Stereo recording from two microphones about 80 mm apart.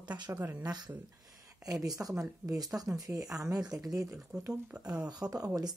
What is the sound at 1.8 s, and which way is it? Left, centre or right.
Speech, right.